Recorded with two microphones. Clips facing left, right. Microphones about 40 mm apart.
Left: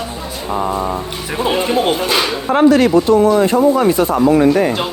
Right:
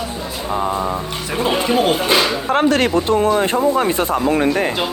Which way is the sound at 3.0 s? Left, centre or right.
Right.